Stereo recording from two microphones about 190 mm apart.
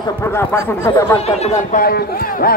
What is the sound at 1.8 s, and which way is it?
Speech, 50° left (ahead or behind).